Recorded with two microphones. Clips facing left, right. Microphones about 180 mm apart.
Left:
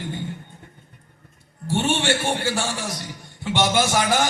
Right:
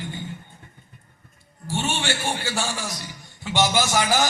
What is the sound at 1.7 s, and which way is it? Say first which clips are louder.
Speech: left 5 dB; 60° left (ahead or behind).